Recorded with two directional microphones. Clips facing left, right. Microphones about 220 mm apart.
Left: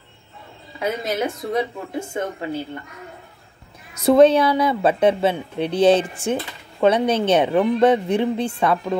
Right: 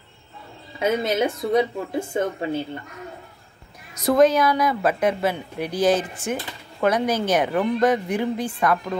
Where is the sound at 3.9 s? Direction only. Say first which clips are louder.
Left 4 dB; 25° left (ahead or behind).